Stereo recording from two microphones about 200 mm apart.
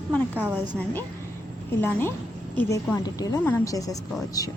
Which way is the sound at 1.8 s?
10° left (ahead or behind).